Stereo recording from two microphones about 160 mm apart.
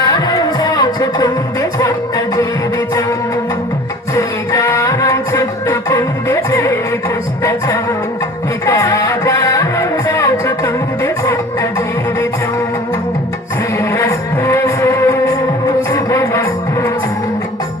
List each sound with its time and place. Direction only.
0.0 s music: 25° left (ahead or behind)
4.1 s music: 20° left (ahead or behind)
8.6 s music: 20° left (ahead or behind)
13.7 s music: 15° left (ahead or behind)